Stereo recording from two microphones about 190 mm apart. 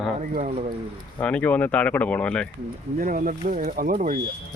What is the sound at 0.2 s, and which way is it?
Speech, 40° right (ahead or behind).